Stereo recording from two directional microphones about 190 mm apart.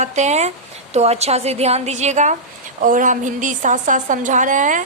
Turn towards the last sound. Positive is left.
turn(degrees=-40)  # may be behind; listen again after turning